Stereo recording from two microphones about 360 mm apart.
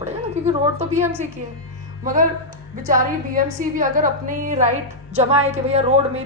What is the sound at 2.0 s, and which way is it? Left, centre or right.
A woman's voice, right.